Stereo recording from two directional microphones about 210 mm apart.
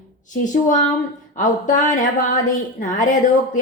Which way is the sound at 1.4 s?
35° left (ahead or behind).